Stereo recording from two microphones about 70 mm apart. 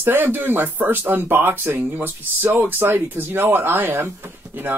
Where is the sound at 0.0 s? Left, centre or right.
Right.